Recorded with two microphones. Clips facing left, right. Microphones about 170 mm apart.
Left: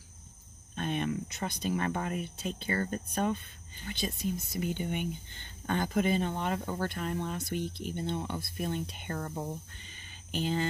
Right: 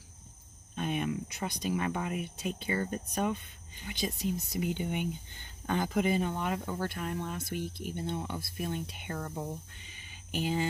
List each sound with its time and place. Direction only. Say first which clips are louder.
0.7 s speech: even; 10° right (ahead or behind)
9.3 s speech: left 1 dB; 10° left (ahead or behind)
9.8 s a sound: even; 10° right (ahead or behind)